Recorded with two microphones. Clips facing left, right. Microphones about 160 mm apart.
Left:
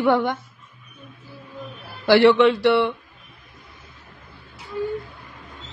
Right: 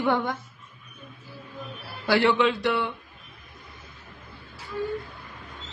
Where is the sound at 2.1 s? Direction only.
70° left (ahead or behind).